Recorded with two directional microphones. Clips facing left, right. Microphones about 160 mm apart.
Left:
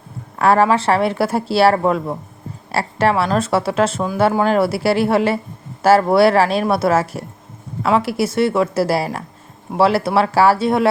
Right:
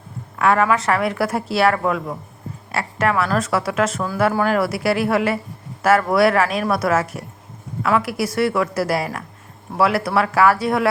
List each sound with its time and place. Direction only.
0.3 s speech: 35° left (ahead or behind)